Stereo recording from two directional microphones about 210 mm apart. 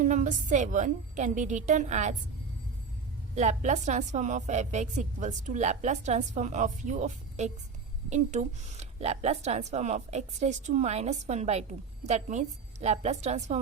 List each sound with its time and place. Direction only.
0.0 s speech: 35° right (ahead or behind)
3.3 s speech: 35° right (ahead or behind)